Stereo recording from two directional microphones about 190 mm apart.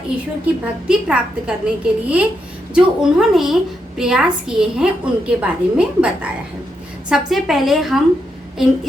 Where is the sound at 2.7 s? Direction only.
5° right (ahead or behind).